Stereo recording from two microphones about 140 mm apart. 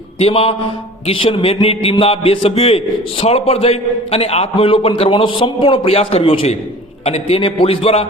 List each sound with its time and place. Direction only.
0.2 s a man's voice: 45° left (ahead or behind)